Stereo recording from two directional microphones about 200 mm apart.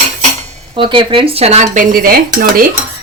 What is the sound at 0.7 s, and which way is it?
Dishes, 25° right (ahead or behind).